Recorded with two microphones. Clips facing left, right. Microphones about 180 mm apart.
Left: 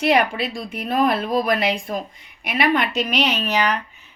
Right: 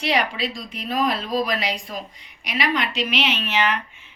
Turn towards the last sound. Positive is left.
turn(degrees=40)  # may be behind; listen again after turning